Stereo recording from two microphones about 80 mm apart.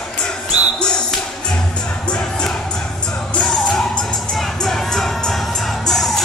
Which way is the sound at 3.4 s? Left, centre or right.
Centre.